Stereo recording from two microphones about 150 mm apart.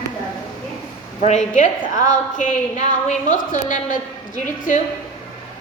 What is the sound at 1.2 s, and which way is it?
A woman's voice, 50° left (ahead or behind).